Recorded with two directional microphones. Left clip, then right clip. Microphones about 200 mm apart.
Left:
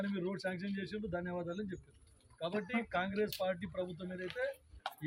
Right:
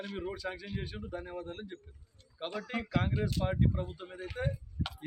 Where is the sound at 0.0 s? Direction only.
Centre (ahead or behind).